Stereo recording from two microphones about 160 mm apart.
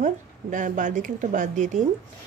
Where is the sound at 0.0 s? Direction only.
55° right (ahead or behind).